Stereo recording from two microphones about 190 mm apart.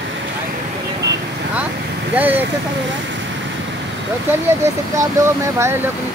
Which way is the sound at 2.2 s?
10° right (ahead or behind).